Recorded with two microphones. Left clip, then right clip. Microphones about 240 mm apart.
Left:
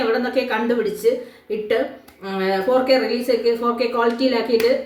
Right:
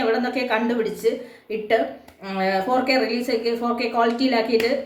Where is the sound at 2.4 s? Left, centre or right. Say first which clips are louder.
Left 2 dB; centre.